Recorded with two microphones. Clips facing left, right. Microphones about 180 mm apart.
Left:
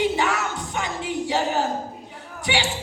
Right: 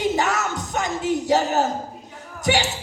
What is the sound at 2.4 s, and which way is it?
Speech, 40° right (ahead or behind).